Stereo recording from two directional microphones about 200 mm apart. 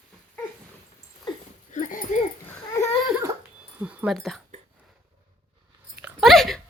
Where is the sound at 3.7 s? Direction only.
5° right (ahead or behind).